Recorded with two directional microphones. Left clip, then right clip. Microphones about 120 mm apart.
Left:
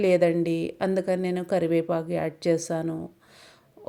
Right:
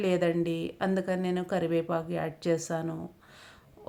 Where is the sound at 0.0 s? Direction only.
40° left (ahead or behind).